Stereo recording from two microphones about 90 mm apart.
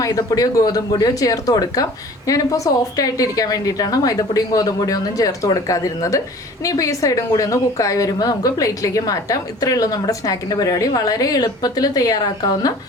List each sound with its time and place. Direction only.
0.0 s speech: 40° left (ahead or behind)